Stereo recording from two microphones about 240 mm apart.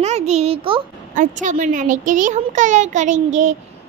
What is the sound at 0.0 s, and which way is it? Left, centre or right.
A child's voice, right.